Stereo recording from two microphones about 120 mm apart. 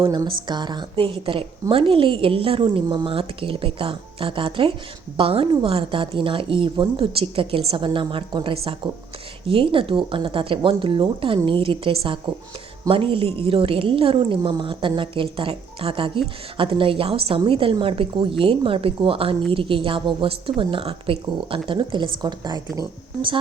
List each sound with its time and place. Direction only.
0.0 s a woman's voice: 35° right (ahead or behind)